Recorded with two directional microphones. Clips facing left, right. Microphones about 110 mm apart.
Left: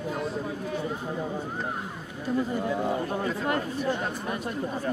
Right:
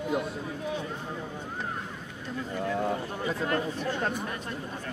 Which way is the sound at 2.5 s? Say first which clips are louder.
Left 2 dB; 10° left (ahead or behind).